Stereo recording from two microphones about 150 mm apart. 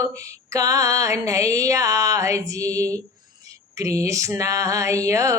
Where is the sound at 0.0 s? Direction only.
20° right (ahead or behind).